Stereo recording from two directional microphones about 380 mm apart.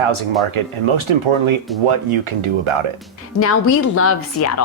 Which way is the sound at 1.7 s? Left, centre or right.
Centre.